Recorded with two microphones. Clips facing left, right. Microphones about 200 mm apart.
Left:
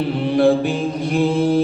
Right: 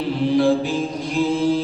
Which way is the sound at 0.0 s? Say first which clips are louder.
Left 2 dB; 60° left (ahead or behind).